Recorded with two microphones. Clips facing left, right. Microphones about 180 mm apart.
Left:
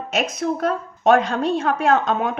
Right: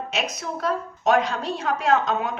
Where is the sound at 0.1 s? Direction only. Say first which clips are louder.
Left 10 dB; 50° left (ahead or behind).